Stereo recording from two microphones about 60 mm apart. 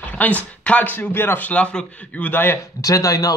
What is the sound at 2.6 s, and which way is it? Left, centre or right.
Speech, left.